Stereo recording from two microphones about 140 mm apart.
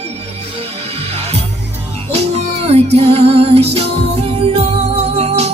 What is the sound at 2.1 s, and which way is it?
Music, 50° right (ahead or behind).